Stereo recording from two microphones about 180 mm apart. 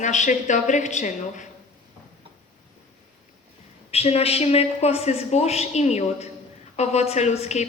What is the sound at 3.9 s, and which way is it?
A woman's voice, 35° left (ahead or behind).